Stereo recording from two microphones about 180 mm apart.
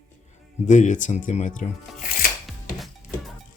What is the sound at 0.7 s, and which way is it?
Speech, 45° left (ahead or behind).